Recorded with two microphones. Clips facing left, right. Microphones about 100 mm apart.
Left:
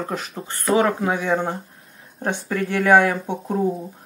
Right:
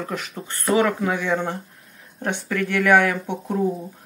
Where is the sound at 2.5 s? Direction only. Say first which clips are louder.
Left 1 dB; 25° left (ahead or behind); by 3.9 s 10° left (ahead or behind).